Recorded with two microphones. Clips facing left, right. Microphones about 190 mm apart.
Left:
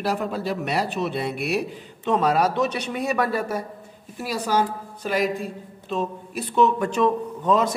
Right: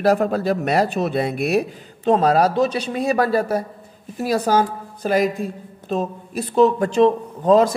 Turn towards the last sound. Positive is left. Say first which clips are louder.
# right 6 dB
turn(degrees=-35)  # may be behind; listen again after turning